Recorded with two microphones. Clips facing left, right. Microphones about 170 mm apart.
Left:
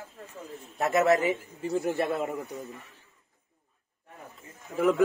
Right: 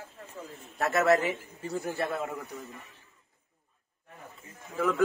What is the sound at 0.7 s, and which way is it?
A man's voice, 15° left (ahead or behind).